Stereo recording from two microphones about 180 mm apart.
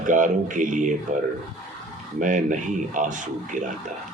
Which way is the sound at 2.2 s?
45° right (ahead or behind).